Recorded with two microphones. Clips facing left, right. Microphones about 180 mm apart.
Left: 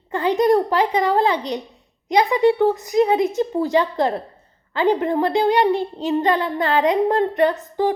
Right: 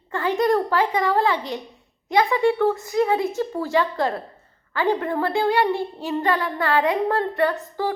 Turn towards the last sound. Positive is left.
turn(degrees=20)  # may be behind; listen again after turning